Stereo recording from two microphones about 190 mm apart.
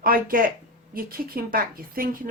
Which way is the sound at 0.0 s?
50° right (ahead or behind).